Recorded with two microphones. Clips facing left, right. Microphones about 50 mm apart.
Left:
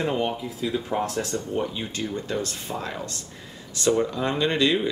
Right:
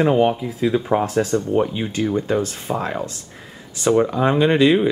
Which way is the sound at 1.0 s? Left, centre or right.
Centre.